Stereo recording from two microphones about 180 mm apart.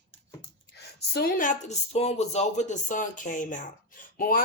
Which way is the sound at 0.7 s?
65° left (ahead or behind).